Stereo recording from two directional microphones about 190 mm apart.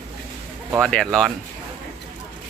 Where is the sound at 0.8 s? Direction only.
5° left (ahead or behind).